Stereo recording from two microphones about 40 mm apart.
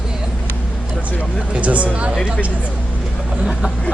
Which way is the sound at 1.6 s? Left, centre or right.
Right.